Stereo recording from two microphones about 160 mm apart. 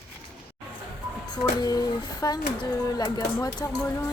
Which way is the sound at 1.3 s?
25° left (ahead or behind).